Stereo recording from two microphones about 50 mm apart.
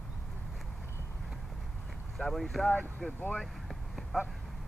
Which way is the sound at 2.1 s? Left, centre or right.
Centre.